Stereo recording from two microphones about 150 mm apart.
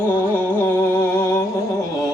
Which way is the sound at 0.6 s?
15° left (ahead or behind).